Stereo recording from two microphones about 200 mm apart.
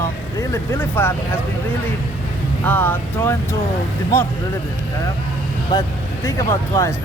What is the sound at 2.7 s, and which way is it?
Speech, 10° left (ahead or behind).